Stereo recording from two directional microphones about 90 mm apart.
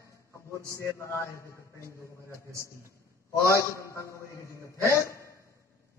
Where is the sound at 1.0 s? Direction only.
30° left (ahead or behind).